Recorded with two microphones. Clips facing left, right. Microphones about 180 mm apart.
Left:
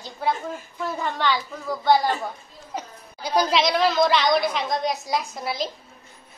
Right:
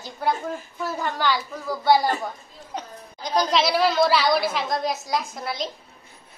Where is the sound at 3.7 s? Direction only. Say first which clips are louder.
Even; 10° right (ahead or behind).